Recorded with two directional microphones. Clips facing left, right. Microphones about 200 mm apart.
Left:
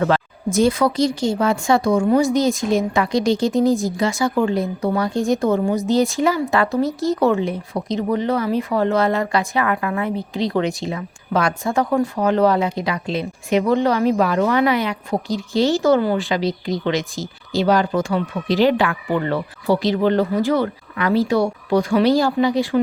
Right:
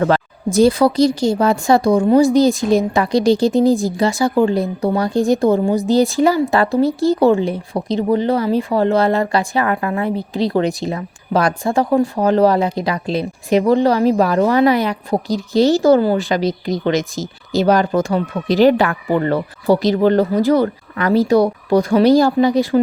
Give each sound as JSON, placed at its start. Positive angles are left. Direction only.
{"t": 0.0, "sound": "speech", "side_deg": -35}